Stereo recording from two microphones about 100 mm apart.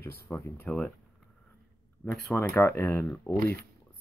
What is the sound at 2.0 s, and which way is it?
Speech, 5° left (ahead or behind).